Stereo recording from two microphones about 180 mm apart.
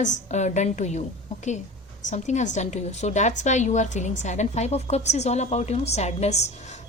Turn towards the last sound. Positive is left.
turn(degrees=40)  # may be behind; listen again after turning